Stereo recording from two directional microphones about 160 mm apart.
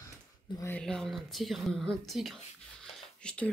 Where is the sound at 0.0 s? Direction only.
20° left (ahead or behind).